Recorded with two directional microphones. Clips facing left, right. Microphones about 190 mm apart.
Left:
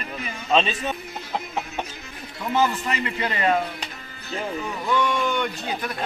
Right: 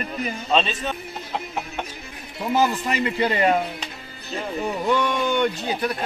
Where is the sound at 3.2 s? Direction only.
30° right (ahead or behind).